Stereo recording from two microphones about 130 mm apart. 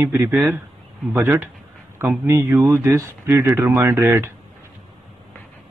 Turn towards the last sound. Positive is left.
turn(degrees=-20)  # may be behind; listen again after turning